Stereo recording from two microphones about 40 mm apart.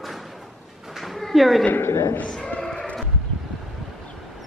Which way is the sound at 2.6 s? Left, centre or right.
Centre.